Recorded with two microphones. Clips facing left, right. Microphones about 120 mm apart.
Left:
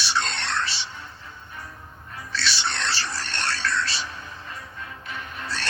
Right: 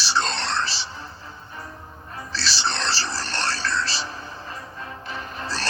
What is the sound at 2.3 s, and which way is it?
Music, 35° right (ahead or behind).